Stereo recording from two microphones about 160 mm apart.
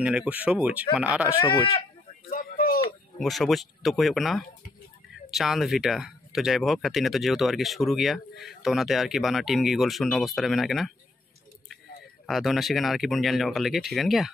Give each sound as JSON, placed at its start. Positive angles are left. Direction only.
{"t": 0.0, "sound": "speech", "side_deg": -5}
{"t": 2.2, "sound": "a sound", "side_deg": 60}
{"t": 3.2, "sound": "speech", "side_deg": 0}
{"t": 12.3, "sound": "speech", "side_deg": 0}